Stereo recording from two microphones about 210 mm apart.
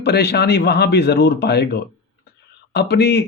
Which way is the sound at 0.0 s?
50° left (ahead or behind).